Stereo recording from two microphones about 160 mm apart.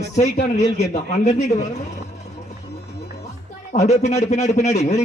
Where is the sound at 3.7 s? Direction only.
45° left (ahead or behind).